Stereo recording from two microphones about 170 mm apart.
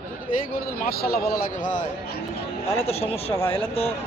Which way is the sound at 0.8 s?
65° left (ahead or behind).